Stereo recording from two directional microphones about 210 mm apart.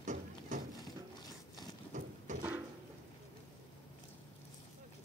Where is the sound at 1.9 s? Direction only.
35° right (ahead or behind).